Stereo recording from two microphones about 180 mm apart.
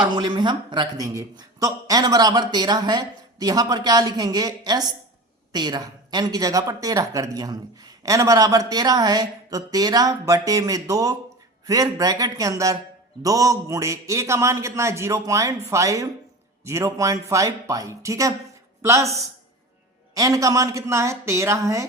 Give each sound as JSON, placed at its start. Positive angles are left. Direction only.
{"t": 0.0, "sound": "a woman's voice", "side_deg": -25}
{"t": 20.1, "sound": "a man's voice", "side_deg": -20}